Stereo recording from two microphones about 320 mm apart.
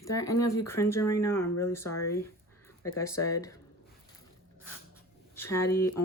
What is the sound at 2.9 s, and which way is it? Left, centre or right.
Speech, centre.